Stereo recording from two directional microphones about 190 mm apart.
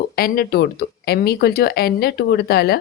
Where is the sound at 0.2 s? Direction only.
55° left (ahead or behind).